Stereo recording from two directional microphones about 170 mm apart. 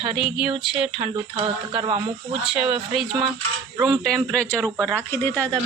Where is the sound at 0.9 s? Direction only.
35° right (ahead or behind).